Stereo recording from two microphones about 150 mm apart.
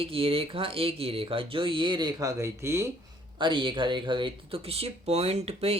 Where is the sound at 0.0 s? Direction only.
40° right (ahead or behind); by 2.9 s 15° right (ahead or behind).